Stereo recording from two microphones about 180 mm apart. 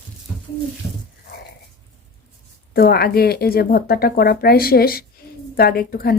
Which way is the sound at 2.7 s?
60° left (ahead or behind).